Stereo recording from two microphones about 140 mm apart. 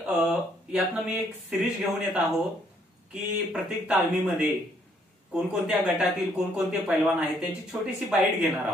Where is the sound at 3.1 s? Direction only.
5° right (ahead or behind).